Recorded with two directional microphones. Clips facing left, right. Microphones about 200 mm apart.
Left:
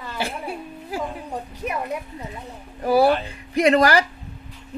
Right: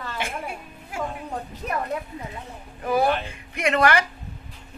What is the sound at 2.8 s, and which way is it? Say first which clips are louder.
Speech: left 5 dB; 35° left (ahead or behind).